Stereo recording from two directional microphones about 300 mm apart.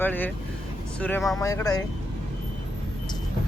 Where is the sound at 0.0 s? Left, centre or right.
Centre.